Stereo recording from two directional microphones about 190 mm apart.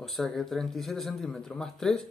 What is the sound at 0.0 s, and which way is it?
Speech, centre (ahead or behind).